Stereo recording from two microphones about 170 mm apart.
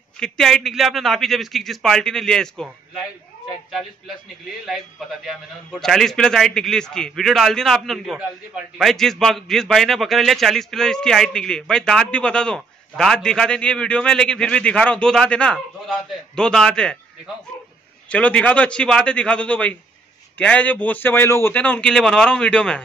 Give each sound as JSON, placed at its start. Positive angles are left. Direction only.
{"t": 0.2, "sound": "a man's voice", "side_deg": 5}
{"t": 4.6, "sound": "a man's voice", "side_deg": 0}
{"t": 18.1, "sound": "a man's voice", "side_deg": 5}